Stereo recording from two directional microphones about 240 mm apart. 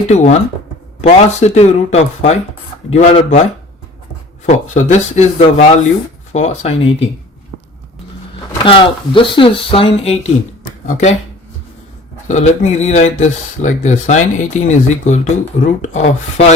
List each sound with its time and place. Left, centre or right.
0.1 s speech: left
4.4 s speech: left
8.6 s speech: left
12.3 s speech: left